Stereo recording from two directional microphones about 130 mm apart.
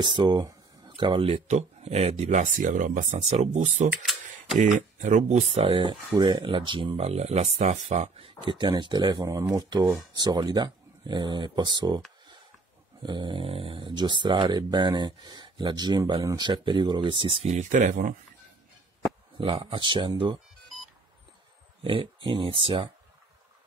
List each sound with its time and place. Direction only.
0.0 s speech: 35° right (ahead or behind); by 3.2 s 85° right
3.9 s typing: 5° right (ahead or behind)
4.6 s speech: 80° right
5.5 s speech: 50° right (ahead or behind)
5.8 s speech: 35° right (ahead or behind); by 8.3 s 60° right (ahead or behind)
8.4 s speech: 35° right (ahead or behind)
13.0 s speech: 35° right (ahead or behind); by 18.1 s 70° right (ahead or behind)
19.3 s speech: 40° right (ahead or behind)
21.8 s speech: 40° right (ahead or behind)